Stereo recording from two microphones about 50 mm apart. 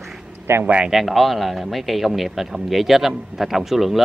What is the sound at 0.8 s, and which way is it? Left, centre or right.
A man's voice, centre.